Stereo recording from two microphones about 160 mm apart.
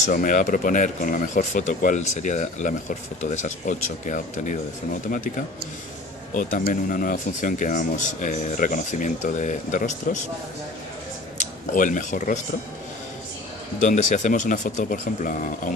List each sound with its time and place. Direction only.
0.0 s speech: 55° left (ahead or behind)
6.3 s speech: 50° left (ahead or behind)
11.3 s speech: 50° left (ahead or behind)
13.7 s speech: 50° left (ahead or behind)